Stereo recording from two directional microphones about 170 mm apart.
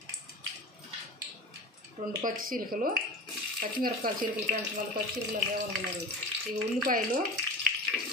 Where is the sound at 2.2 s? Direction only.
55° right (ahead or behind).